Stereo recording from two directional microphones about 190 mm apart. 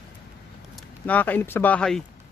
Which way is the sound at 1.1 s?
10° left (ahead or behind).